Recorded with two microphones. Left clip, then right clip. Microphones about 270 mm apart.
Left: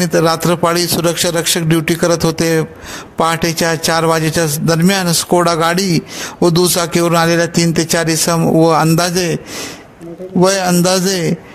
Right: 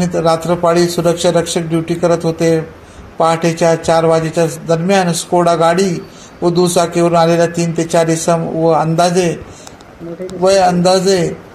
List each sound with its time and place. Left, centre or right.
0.0 s a man's voice: left
10.4 s a man's voice: left